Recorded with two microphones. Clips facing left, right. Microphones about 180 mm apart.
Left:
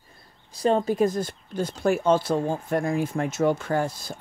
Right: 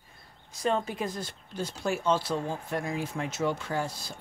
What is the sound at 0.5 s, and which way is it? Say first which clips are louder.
Speech: left 7 dB; 35° left (ahead or behind).